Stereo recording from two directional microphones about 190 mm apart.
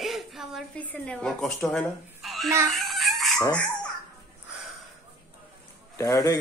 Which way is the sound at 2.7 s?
Centre (ahead or behind).